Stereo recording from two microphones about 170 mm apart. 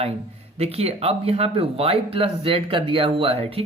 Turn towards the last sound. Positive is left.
turn(degrees=-35)  # may be behind; listen again after turning